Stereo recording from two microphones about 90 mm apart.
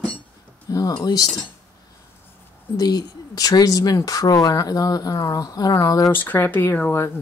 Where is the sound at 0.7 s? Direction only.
45° left (ahead or behind).